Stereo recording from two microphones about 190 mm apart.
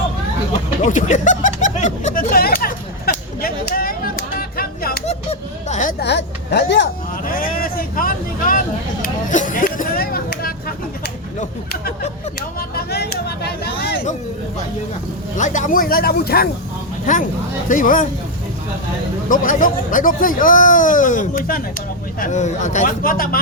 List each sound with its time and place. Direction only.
0.8 s speech: 40° left (ahead or behind)
2.3 s a sound: 50° left (ahead or behind)
5.0 s a sound: 35° left (ahead or behind)
6.0 s speech: 65° left (ahead or behind)
7.3 s speech: 50° left (ahead or behind)
15.4 s speech: 40° left (ahead or behind)
17.1 s speech: 45° left (ahead or behind)
19.3 s speech: 45° left (ahead or behind)